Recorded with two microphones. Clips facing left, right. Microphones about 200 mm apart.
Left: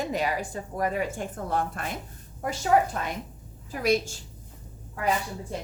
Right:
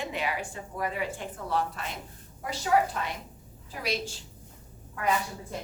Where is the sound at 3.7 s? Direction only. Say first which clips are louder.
Left 8 dB; 45° left (ahead or behind).